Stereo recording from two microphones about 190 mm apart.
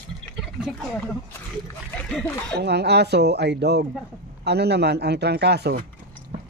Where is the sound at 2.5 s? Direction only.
60° right (ahead or behind).